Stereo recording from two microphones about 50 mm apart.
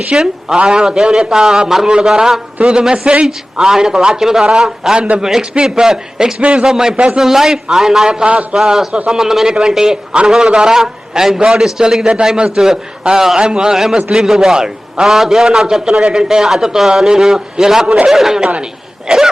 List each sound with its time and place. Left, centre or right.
0.2 s a man's voice: centre
4.9 s a man's voice: right
5.2 s a man's voice: centre
6.9 s a man's voice: right
7.2 s a man's voice: centre
8.2 s a man's voice: right
8.5 s a man's voice: centre
12.0 s a man's voice: right
18.1 s a man's voice: centre
19.0 s wheeze: centre